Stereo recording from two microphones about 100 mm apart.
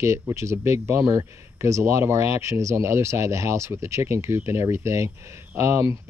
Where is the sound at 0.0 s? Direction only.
30° right (ahead or behind).